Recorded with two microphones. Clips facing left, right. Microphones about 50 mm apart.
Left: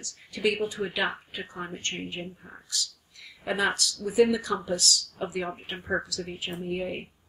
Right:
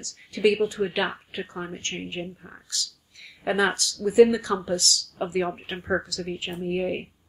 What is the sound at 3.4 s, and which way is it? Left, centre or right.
Speech, right.